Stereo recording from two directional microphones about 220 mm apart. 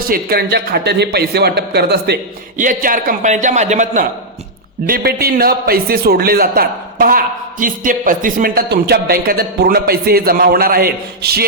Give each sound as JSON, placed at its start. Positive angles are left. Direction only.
{"t": 0.1, "sound": "a man's voice", "side_deg": -45}
{"t": 4.9, "sound": "speech", "side_deg": -45}